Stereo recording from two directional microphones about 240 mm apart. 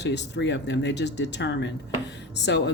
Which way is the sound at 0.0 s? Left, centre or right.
Left.